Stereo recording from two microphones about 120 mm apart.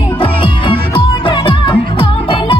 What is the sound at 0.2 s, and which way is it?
Music, 45° left (ahead or behind).